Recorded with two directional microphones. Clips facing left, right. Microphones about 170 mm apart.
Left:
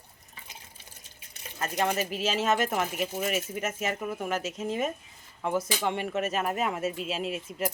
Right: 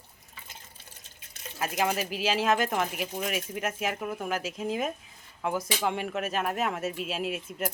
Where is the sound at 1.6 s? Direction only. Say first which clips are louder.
Even; 5° right (ahead or behind).